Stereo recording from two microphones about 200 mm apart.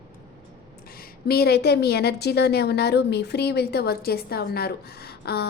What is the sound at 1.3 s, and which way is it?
A woman's voice, 50° left (ahead or behind).